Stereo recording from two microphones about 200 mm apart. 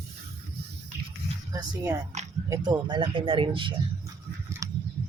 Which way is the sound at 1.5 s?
15° right (ahead or behind).